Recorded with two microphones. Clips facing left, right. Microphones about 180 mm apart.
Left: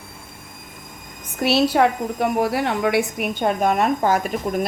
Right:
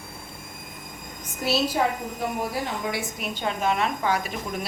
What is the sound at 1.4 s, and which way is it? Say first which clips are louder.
A woman's voice: left 7 dB; 65° left (ahead or behind).